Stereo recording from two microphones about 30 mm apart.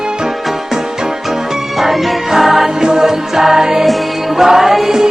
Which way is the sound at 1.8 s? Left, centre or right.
Centre.